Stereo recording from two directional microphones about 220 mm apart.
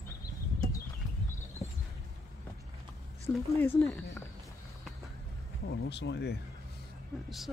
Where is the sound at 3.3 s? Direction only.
15° left (ahead or behind).